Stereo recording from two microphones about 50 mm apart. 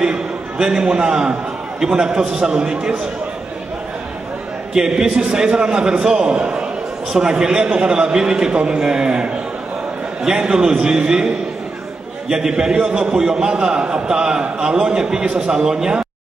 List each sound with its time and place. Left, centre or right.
0.0 s a man's voice: centre
4.7 s a man's voice: centre
12.3 s a man's voice: centre